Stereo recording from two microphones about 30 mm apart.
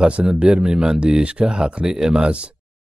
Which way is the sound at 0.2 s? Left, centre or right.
Right.